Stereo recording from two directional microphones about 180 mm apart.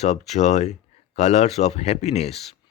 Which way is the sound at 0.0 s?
40° left (ahead or behind).